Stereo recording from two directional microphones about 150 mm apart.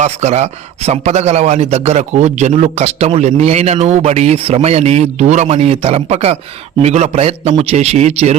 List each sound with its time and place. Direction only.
0.0 s a man's voice: 50° right (ahead or behind)